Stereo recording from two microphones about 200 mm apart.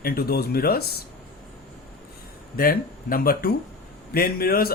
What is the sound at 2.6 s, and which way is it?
Speech, 50° left (ahead or behind).